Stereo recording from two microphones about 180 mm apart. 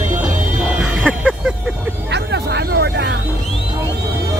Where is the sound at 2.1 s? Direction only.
70° right (ahead or behind).